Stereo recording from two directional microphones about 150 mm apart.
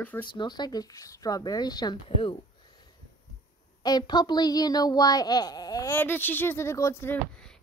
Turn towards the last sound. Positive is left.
turn(degrees=15)  # may be behind; listen again after turning